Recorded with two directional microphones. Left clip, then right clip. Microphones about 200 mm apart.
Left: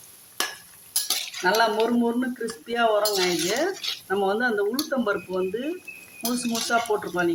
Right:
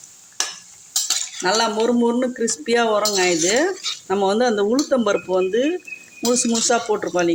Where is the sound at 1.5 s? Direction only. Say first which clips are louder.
Right 2 dB; 40° right (ahead or behind).